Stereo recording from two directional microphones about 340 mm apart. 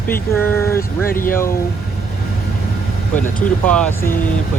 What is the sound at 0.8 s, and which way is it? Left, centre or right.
Speech, left.